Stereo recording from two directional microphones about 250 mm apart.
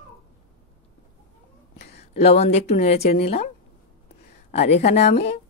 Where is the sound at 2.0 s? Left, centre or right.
Left.